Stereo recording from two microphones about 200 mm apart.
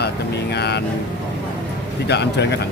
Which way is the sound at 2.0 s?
60° left (ahead or behind).